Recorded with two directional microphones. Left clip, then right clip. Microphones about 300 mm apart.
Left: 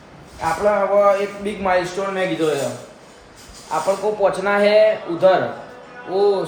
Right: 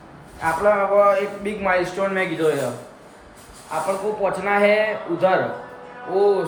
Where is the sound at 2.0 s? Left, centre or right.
Centre.